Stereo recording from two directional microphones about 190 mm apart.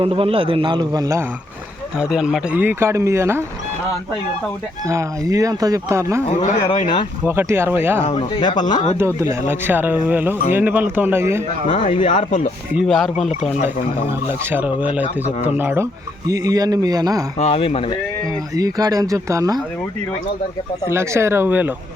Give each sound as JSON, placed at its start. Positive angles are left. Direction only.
{"t": 0.0, "sound": "speech", "side_deg": -30}
{"t": 2.0, "sound": "speech", "side_deg": -5}
{"t": 4.9, "sound": "speech", "side_deg": -15}
{"t": 6.2, "sound": "speech", "side_deg": 30}
{"t": 7.3, "sound": "speech", "side_deg": -10}
{"t": 8.0, "sound": "speech", "side_deg": 35}
{"t": 9.0, "sound": "speech", "side_deg": -15}
{"t": 11.7, "sound": "speech", "side_deg": 40}
{"t": 12.7, "sound": "speech", "side_deg": 0}
{"t": 14.5, "sound": "speech", "side_deg": -5}
{"t": 17.3, "sound": "speech", "side_deg": 35}
{"t": 18.5, "sound": "speech", "side_deg": -20}
{"t": 20.8, "sound": "speech", "side_deg": -15}